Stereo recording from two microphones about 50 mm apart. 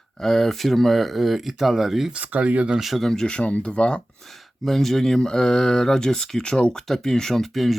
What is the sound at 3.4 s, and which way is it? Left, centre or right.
Speech, left.